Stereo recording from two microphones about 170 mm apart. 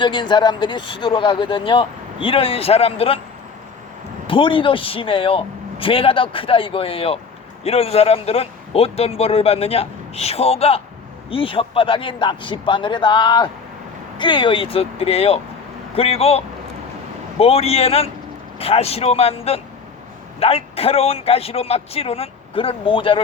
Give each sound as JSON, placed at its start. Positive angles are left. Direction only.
{"t": 0.0, "sound": "speech", "side_deg": 25}
{"t": 4.3, "sound": "a man's voice", "side_deg": 30}
{"t": 17.4, "sound": "a man's voice", "side_deg": 35}